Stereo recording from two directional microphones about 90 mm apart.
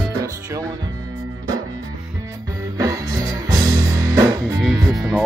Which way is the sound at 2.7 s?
45° right (ahead or behind).